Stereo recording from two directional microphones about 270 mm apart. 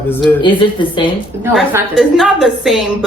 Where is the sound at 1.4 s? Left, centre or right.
Centre.